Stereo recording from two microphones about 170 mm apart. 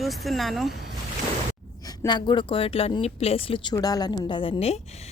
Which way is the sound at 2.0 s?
25° left (ahead or behind).